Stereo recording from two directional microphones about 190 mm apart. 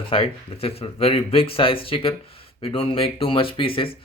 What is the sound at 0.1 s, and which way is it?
Speech, 30° left (ahead or behind).